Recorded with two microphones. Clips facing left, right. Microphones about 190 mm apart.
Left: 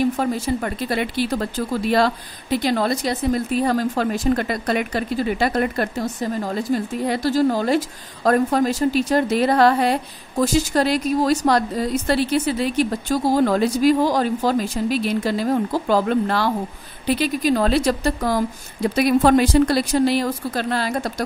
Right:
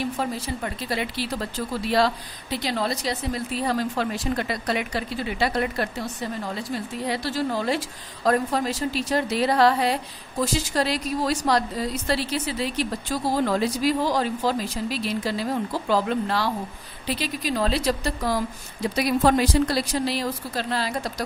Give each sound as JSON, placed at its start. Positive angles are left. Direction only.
{"t": 0.0, "sound": "a woman's voice", "side_deg": 50}